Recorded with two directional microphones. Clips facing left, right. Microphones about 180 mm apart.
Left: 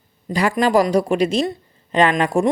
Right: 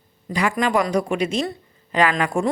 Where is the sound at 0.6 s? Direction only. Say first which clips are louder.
Left 5 dB; 35° left (ahead or behind).